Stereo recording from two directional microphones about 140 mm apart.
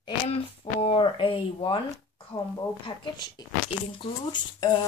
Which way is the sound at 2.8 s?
35° left (ahead or behind).